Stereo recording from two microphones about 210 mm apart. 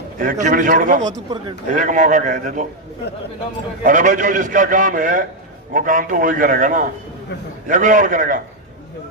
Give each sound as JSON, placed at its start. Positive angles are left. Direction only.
{"t": 0.2, "sound": "a man's voice", "side_deg": -40}
{"t": 1.0, "sound": "speech", "side_deg": -20}
{"t": 1.7, "sound": "a man's voice", "side_deg": -40}
{"t": 3.8, "sound": "a man's voice", "side_deg": -40}